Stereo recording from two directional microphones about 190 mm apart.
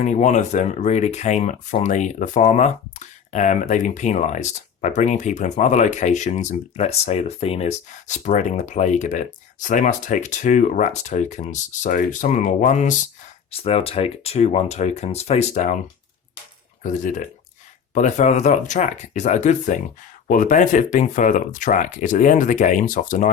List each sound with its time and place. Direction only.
0.0 s speech: 40° left (ahead or behind)
16.8 s speech: 45° left (ahead or behind)